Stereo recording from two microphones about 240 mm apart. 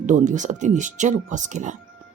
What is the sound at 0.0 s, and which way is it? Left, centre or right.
Speech, right.